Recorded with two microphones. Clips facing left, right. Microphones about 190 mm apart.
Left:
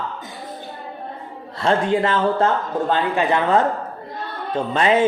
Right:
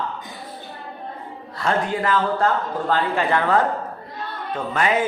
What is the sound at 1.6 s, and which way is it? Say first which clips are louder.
Speech: left 4 dB; 25° left (ahead or behind).